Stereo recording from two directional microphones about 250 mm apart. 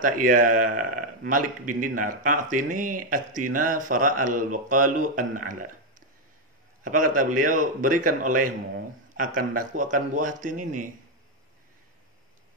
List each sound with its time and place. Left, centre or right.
0.0 s speech: right
6.8 s a man's voice: right